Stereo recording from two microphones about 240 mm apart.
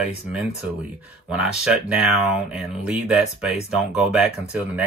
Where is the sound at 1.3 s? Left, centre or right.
Centre.